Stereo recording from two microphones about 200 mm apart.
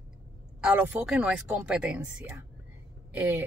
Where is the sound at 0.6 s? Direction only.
5° right (ahead or behind).